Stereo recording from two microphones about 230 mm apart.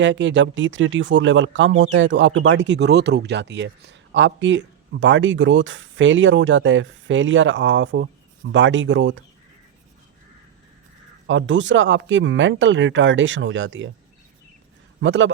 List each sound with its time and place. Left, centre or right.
0.0 s speech: right
11.3 s speech: right
15.0 s speech: right